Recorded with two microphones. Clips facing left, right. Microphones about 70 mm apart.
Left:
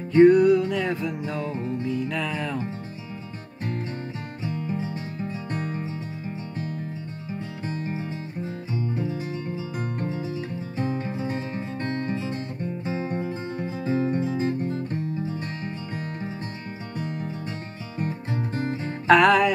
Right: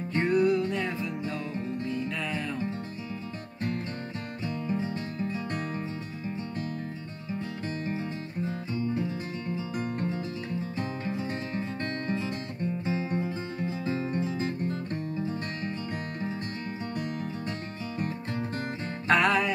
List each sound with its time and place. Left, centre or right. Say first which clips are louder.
0.1 s music: left 10 dB; left
2.0 s music: left 4 dB; left
4.5 s music: left 1 dB; centre
7.6 s music: left 3 dB; centre
10.8 s music: left 8 dB; left
18.3 s music: left 4 dB; centre
19.0 s music: left 7 dB; left